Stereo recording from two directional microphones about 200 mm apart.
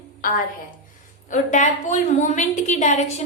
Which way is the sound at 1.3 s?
35° left (ahead or behind).